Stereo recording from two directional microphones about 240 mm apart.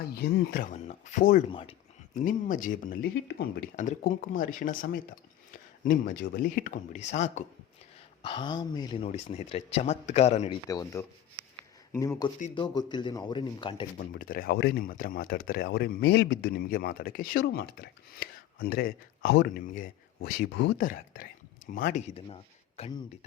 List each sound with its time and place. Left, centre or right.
0.1 s speech: left
10.7 s speech: centre
14.0 s speech: left
20.6 s speech: left
20.8 s speech: left; by 23.0 s centre